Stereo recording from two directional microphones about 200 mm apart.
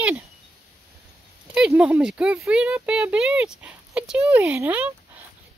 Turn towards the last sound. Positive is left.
turn(degrees=-10)  # may be behind; listen again after turning